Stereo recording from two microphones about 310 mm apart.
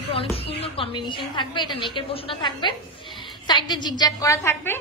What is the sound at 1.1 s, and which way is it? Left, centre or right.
A woman's voice, centre.